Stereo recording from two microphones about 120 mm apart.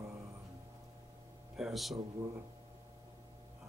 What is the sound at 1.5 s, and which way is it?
Speech, centre (ahead or behind).